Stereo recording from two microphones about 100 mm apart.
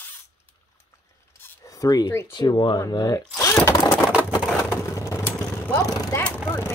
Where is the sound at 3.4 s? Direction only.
30° left (ahead or behind).